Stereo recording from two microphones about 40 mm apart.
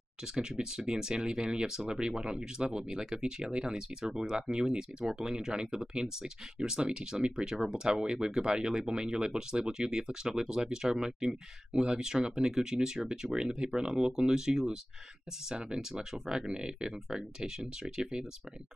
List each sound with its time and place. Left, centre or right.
0.2 s speech: centre